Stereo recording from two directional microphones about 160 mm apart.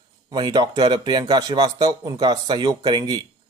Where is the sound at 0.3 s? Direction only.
25° right (ahead or behind).